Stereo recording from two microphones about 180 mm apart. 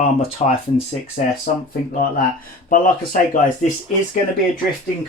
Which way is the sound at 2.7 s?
50° left (ahead or behind).